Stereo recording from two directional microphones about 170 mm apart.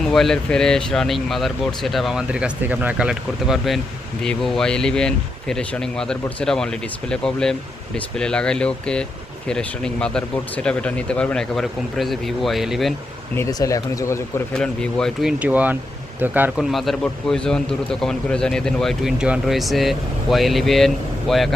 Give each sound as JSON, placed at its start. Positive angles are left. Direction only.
{"t": 0.0, "sound": "a man's voice", "side_deg": 0}
{"t": 13.3, "sound": "speech", "side_deg": 20}
{"t": 14.5, "sound": "a man's voice", "side_deg": 5}
{"t": 16.7, "sound": "a man's voice", "side_deg": 0}